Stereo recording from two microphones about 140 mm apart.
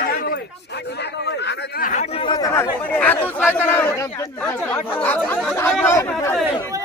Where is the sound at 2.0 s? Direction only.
35° left (ahead or behind).